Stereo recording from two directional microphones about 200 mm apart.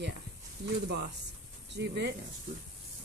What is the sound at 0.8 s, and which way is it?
Speech, 55° right (ahead or behind).